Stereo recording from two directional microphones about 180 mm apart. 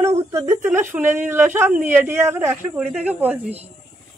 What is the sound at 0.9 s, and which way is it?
Speech, 10° right (ahead or behind).